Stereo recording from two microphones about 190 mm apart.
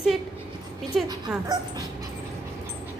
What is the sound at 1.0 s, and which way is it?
Speech, 20° right (ahead or behind).